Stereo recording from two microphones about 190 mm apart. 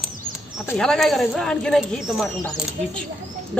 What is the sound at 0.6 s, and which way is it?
Speech, 5° left (ahead or behind).